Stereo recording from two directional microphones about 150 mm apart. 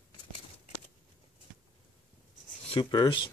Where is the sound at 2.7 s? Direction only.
30° left (ahead or behind).